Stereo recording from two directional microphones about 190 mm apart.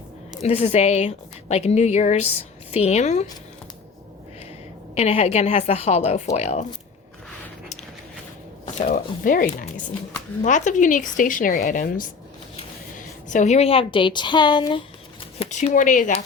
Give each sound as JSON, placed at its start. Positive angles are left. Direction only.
{"t": 0.4, "sound": "a woman's voice", "side_deg": 35}
{"t": 4.9, "sound": "a woman's voice", "side_deg": 35}
{"t": 8.9, "sound": "a woman's voice", "side_deg": 45}
{"t": 13.2, "sound": "a woman's voice", "side_deg": 40}